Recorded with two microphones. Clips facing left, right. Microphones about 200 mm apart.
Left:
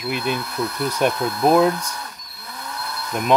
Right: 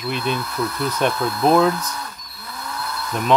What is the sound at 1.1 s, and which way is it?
Speech, 25° left (ahead or behind).